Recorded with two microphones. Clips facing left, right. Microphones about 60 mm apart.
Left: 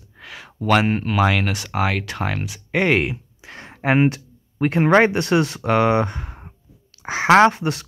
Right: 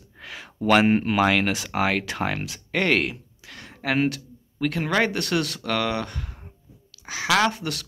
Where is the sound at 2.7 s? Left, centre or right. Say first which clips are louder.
Left 4 dB; centre.